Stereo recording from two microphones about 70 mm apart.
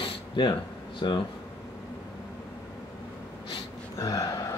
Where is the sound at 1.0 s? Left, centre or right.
Left.